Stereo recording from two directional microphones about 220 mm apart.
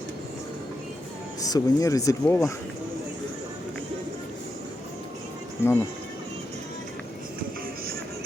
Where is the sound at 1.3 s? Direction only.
15° left (ahead or behind).